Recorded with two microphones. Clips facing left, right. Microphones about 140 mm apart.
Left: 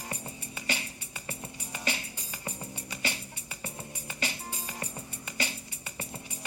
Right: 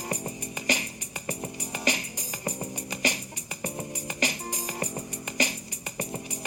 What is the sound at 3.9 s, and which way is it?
Music, 80° right.